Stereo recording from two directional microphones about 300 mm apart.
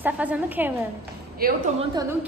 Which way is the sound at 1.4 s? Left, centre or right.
Right.